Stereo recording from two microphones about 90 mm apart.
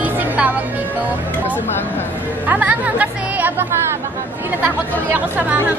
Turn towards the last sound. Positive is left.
turn(degrees=-20)  # may be behind; listen again after turning